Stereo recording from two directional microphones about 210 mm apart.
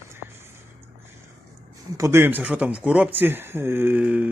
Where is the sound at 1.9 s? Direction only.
15° right (ahead or behind).